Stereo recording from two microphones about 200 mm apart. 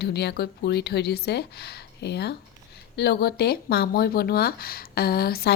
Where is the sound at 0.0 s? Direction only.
55° left (ahead or behind).